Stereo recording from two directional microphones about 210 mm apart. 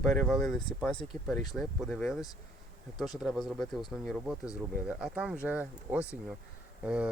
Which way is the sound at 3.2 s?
Centre (ahead or behind).